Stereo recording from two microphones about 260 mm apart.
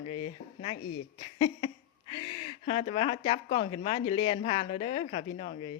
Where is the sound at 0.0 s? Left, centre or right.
Left.